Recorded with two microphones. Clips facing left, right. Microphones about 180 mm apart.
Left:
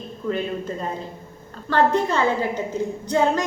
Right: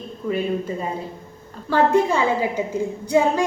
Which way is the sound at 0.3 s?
10° right (ahead or behind).